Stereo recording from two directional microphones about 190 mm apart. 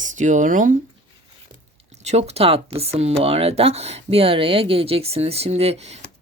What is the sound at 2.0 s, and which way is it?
Speech, 35° right (ahead or behind).